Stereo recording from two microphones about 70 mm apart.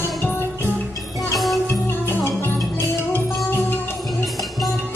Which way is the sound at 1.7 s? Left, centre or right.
Left.